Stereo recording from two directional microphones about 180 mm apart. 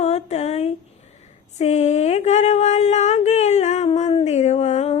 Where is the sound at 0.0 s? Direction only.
35° left (ahead or behind).